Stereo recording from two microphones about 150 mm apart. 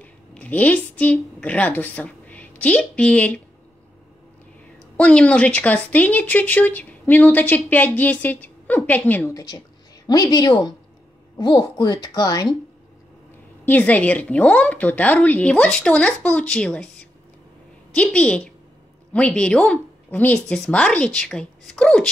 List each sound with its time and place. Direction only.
0.0 s a woman's voice: 10° left (ahead or behind)
4.9 s speech: 10° left (ahead or behind)
10.0 s a woman's voice: 30° left (ahead or behind)
13.7 s speech: 10° left (ahead or behind)
17.9 s speech: 10° left (ahead or behind)